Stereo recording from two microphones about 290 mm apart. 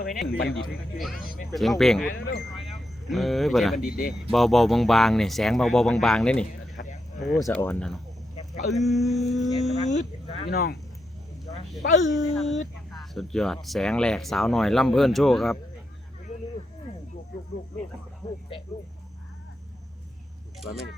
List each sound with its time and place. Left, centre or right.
0.0 s speech: centre
3.1 s speech: centre
3.8 s speech: left
4.3 s speech: centre
9.7 s speech: left
10.5 s speech: left
12.1 s speech: centre